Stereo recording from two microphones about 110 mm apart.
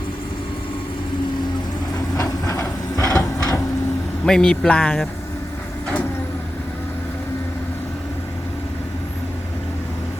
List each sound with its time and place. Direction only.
2.1 s vehicle: 25° left (ahead or behind)
2.9 s a sound: 10° left (ahead or behind)
3.2 s printer: 30° left (ahead or behind)
4.3 s speech: 5° left (ahead or behind)